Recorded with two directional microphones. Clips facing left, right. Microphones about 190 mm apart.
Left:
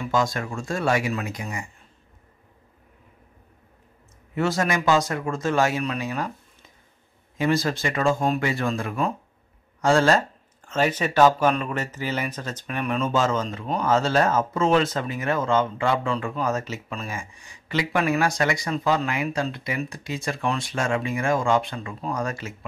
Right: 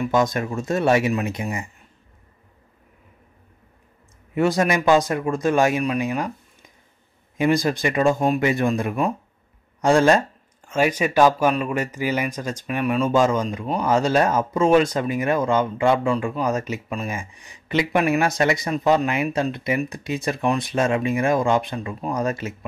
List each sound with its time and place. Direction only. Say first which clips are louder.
0.0 s speech: right 4 dB; 20° right (ahead or behind)
4.4 s speech: right 4 dB; 15° right (ahead or behind)
7.3 s speech: right 3 dB; 15° right (ahead or behind)